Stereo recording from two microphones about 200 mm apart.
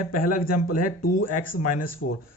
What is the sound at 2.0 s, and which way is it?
Speech, 75° left (ahead or behind).